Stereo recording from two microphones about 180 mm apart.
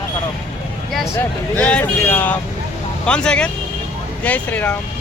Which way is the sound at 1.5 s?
10° left (ahead or behind).